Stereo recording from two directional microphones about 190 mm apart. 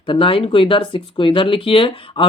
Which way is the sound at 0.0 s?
25° left (ahead or behind).